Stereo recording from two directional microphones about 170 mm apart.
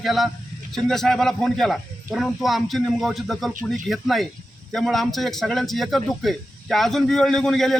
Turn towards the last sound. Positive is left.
turn(degrees=0)  # may be behind; listen again after turning